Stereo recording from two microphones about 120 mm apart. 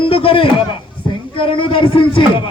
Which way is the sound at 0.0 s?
50° left (ahead or behind).